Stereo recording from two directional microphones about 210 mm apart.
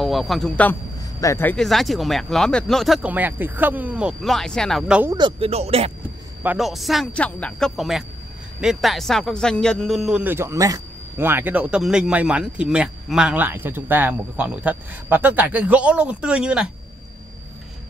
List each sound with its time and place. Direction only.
0.0 s a man's voice: centre (ahead or behind)
5.1 s speech: 25° right (ahead or behind)
6.4 s a man's voice: 5° right (ahead or behind)